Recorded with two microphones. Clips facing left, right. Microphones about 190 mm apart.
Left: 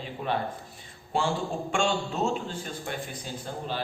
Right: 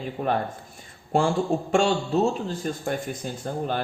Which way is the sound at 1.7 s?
40° right (ahead or behind).